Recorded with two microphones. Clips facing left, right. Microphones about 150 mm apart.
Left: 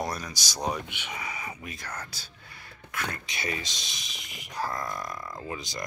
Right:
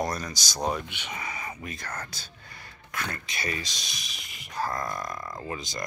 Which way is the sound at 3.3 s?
15° left (ahead or behind).